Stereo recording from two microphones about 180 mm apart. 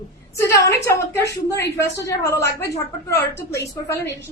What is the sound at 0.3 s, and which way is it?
A woman's voice, 15° left (ahead or behind).